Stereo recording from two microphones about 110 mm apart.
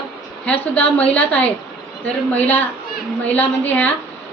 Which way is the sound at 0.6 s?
15° left (ahead or behind).